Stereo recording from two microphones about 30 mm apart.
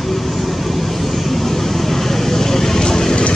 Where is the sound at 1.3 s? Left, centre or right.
Centre.